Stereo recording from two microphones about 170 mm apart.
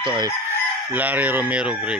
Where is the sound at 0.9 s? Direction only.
10° right (ahead or behind).